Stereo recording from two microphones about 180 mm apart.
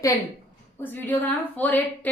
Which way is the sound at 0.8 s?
10° left (ahead or behind).